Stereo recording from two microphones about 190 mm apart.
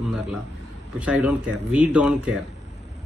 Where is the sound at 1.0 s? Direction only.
5° right (ahead or behind).